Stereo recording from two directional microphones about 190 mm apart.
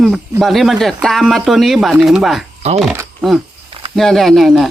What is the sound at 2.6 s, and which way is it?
Speech, 35° right (ahead or behind).